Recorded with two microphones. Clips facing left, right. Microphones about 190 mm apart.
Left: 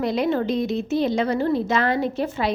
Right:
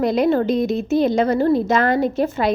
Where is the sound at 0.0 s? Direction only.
45° right (ahead or behind).